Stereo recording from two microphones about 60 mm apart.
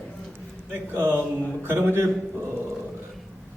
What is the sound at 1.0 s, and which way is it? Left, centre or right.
A man's voice, right.